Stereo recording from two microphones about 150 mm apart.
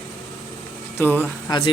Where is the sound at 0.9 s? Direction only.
15° left (ahead or behind).